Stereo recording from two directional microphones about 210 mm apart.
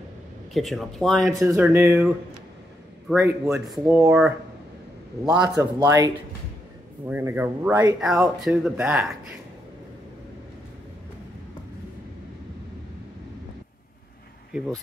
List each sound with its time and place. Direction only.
0.5 s speech: centre (ahead or behind)
1.3 s speech: 15° right (ahead or behind)
3.1 s speech: 10° right (ahead or behind)
5.8 s speech: 15° right (ahead or behind)